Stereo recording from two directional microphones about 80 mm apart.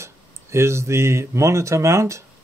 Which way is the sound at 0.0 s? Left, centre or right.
Right.